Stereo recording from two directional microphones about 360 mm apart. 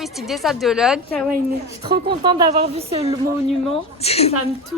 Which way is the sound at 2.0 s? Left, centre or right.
Centre.